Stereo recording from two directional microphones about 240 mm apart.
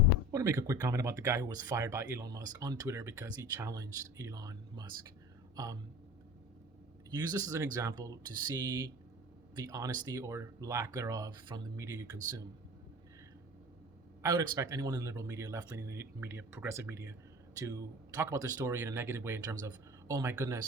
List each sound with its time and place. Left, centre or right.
0.3 s speech: centre
7.1 s speech: centre
14.2 s speech: centre